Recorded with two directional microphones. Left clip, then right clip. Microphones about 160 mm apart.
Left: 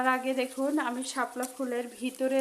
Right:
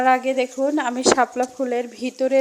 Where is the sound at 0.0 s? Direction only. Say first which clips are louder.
Right 10 dB; 20° right (ahead or behind).